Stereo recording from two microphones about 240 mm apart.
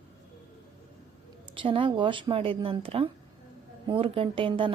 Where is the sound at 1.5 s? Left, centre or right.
Right.